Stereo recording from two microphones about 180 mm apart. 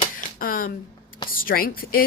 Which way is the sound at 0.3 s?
50° left (ahead or behind).